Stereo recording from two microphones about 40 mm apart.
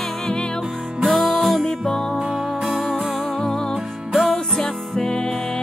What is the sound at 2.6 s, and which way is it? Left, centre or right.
Music, centre.